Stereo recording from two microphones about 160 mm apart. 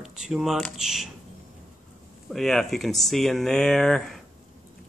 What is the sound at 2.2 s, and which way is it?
Speech, centre (ahead or behind).